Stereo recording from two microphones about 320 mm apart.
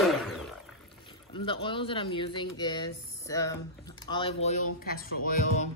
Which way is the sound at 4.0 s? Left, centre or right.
Centre.